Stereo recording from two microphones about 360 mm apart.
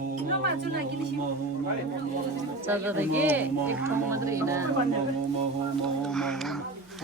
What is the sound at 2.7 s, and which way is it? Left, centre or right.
Music, centre.